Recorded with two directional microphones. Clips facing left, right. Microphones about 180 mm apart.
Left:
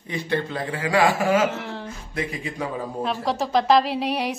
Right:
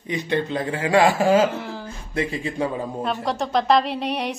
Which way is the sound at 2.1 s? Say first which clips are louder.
Right 4 dB; 30° right (ahead or behind).